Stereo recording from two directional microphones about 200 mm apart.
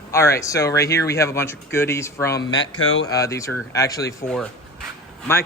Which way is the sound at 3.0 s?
15° left (ahead or behind).